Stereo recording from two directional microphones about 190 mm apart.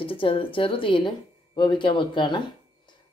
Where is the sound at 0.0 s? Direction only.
30° left (ahead or behind).